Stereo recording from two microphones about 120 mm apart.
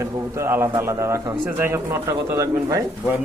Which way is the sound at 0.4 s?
20° right (ahead or behind).